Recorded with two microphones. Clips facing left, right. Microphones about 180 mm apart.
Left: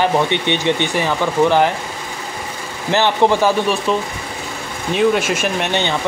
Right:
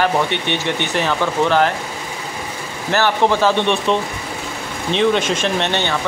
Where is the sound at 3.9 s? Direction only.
5° left (ahead or behind).